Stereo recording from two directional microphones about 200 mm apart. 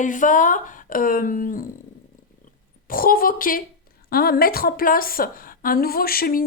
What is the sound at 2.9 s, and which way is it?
A woman's voice, 45° left (ahead or behind).